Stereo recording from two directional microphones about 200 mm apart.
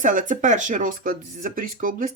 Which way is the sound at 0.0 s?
40° right (ahead or behind).